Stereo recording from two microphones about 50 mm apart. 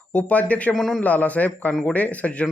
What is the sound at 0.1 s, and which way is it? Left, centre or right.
Speech, left.